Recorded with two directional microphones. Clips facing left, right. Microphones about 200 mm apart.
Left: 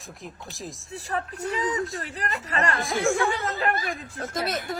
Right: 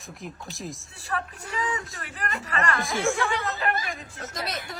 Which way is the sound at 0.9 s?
40° left (ahead or behind).